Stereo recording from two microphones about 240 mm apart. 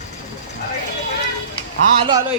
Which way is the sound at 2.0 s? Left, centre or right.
Centre.